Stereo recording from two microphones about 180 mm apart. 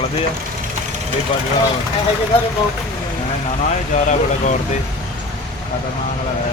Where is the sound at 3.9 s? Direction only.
40° left (ahead or behind).